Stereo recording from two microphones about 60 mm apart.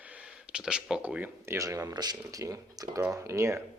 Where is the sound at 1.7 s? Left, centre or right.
Right.